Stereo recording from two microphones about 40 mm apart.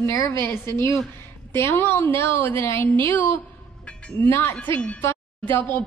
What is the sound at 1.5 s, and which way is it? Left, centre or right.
A woman's voice, left.